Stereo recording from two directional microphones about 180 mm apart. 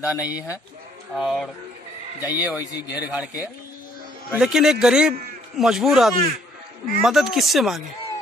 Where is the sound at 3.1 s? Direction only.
10° right (ahead or behind).